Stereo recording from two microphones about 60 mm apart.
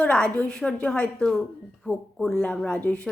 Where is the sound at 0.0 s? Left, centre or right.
Centre.